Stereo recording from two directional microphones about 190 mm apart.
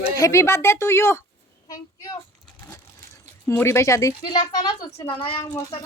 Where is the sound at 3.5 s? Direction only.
15° left (ahead or behind); by 5.5 s 30° left (ahead or behind).